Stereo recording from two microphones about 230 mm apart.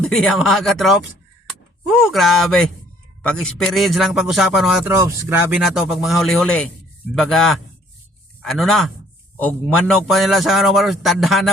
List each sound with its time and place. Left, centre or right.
0.0 s a man's voice: centre
2.0 s a man's voice: centre
5.6 s a man's voice: centre